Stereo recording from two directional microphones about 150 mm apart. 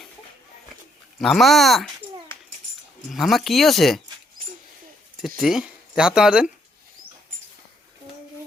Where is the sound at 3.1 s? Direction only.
Centre (ahead or behind).